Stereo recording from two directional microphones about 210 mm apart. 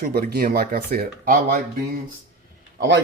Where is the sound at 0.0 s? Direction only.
45° right (ahead or behind).